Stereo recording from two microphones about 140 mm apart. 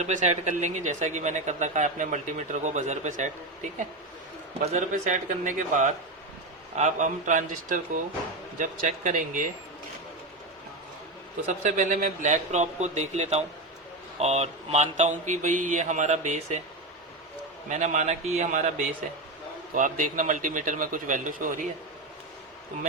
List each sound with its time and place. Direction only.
0.0 s a man's voice: 55° right (ahead or behind)
11.4 s speech: 60° right (ahead or behind)
17.7 s speech: 60° right (ahead or behind)
19.7 s a man's voice: 70° right (ahead or behind)